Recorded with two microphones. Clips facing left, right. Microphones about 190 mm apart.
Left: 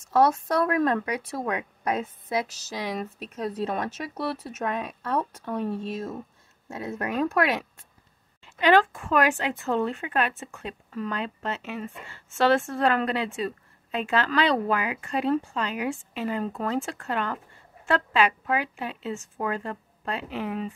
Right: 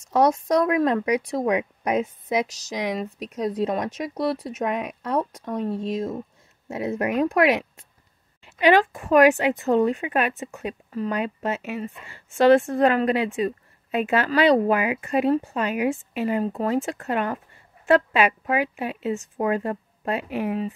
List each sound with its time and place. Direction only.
0.1 s speech: 15° right (ahead or behind)